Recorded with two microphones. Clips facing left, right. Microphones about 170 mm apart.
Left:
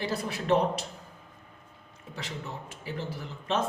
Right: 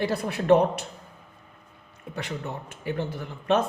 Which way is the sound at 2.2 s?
60° right (ahead or behind).